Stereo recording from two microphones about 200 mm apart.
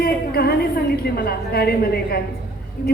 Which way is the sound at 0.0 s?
50° left (ahead or behind).